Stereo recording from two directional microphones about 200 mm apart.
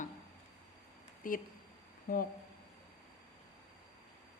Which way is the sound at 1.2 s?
45° left (ahead or behind).